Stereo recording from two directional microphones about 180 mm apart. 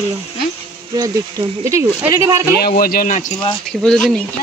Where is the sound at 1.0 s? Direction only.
20° right (ahead or behind).